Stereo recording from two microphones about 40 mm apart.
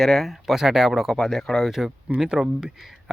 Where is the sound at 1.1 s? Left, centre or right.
Centre.